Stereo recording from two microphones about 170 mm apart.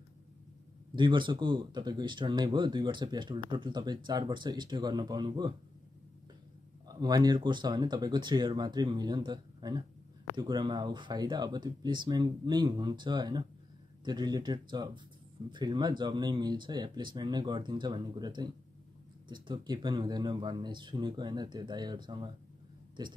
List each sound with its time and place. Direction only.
0.9 s speech: 30° right (ahead or behind)
6.9 s speech: 25° right (ahead or behind)